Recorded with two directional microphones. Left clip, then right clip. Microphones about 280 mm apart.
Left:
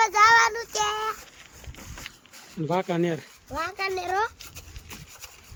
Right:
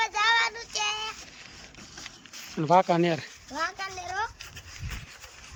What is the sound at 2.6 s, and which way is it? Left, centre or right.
Speech, centre.